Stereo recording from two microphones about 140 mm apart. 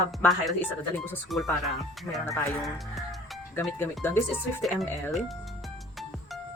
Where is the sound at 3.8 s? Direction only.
15° left (ahead or behind).